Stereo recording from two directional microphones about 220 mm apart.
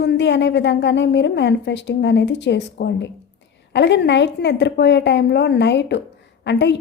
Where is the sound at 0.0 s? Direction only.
50° left (ahead or behind).